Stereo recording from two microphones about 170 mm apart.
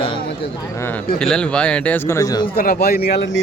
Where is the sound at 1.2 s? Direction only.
5° left (ahead or behind); by 2.5 s 20° left (ahead or behind).